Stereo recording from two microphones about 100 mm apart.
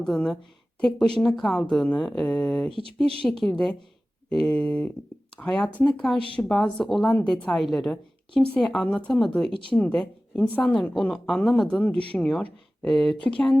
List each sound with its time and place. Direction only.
0.0 s a woman's voice: 5° left (ahead or behind)
9.5 s speech: 60° left (ahead or behind)
9.7 s a woman's voice: 10° left (ahead or behind)